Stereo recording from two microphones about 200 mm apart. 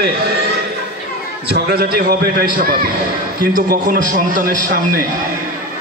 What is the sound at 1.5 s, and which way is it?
A man's voice, 50° right (ahead or behind).